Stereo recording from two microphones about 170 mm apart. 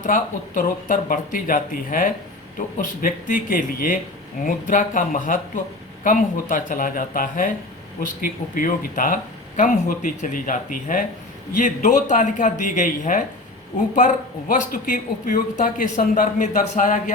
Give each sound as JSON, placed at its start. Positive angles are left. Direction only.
{"t": 0.0, "sound": "speech", "side_deg": 50}